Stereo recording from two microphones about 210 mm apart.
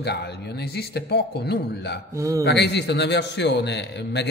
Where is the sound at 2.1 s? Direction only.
15° right (ahead or behind).